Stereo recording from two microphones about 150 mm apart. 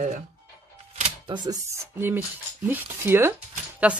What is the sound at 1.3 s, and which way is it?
Speech, 25° right (ahead or behind).